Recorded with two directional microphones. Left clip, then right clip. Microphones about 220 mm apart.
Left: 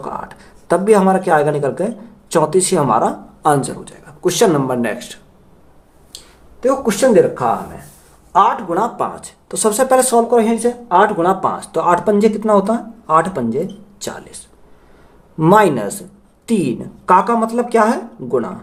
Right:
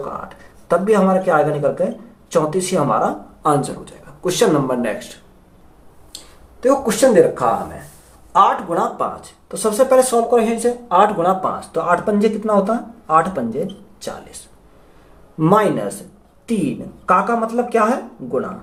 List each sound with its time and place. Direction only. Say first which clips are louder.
0.7 s speech: left 3 dB; 45° left (ahead or behind)
6.6 s speech: even; 25° left (ahead or behind)
9.2 s speech: left 3 dB; 50° left (ahead or behind)
15.4 s speech: left 4 dB; 40° left (ahead or behind)
17.1 s speech: left 3 dB; 50° left (ahead or behind)